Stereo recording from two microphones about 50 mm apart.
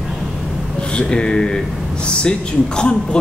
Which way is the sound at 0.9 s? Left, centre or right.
Centre.